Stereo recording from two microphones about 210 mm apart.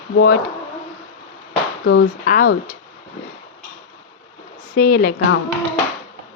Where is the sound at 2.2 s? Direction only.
40° left (ahead or behind).